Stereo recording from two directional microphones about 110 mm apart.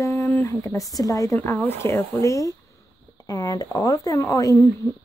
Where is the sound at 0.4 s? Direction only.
25° left (ahead or behind).